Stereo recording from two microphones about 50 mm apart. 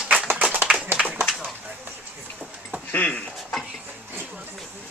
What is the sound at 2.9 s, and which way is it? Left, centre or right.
Speech, left.